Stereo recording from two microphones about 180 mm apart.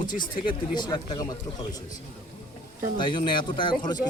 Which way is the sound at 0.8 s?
25° left (ahead or behind).